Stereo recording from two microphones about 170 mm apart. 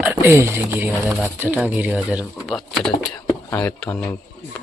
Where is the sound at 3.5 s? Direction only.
10° left (ahead or behind).